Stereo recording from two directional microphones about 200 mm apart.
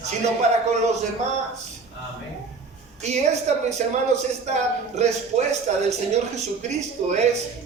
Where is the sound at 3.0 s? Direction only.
35° right (ahead or behind).